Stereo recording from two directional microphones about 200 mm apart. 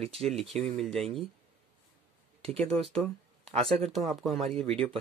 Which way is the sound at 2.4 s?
30° right (ahead or behind).